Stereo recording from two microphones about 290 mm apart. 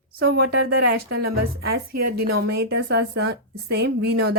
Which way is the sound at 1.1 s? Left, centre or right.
Right.